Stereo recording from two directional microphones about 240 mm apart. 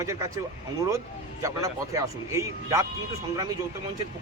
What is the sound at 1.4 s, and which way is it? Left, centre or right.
Speech, centre.